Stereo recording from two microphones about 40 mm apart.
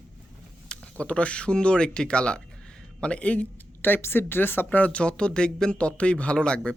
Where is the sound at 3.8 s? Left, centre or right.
Left.